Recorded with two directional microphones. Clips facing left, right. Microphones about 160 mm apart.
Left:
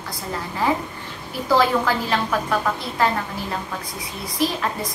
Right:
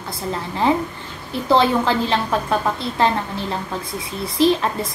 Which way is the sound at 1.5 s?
25° right (ahead or behind).